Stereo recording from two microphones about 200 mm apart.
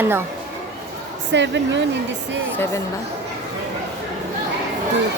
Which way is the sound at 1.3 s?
65° right (ahead or behind).